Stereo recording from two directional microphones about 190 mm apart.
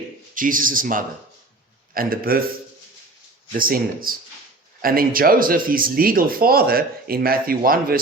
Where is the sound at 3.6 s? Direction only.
50° right (ahead or behind).